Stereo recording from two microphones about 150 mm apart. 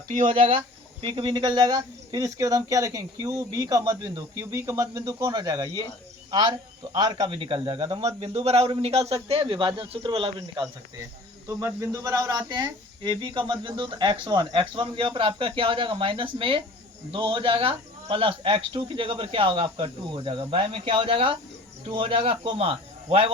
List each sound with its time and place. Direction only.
0.3 s speech: 40° right (ahead or behind)
6.9 s speech: 30° right (ahead or behind)
11.4 s speech: 20° right (ahead or behind); by 23.3 s 40° right (ahead or behind)